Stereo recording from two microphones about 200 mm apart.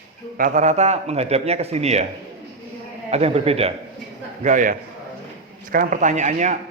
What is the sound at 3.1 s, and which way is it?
A man's voice, 30° right (ahead or behind).